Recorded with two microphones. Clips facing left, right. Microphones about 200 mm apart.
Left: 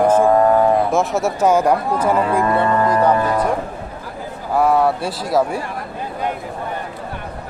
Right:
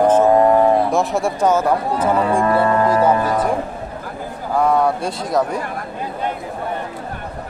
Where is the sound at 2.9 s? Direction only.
5° right (ahead or behind).